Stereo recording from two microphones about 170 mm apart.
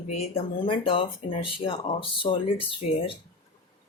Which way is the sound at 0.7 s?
30° left (ahead or behind).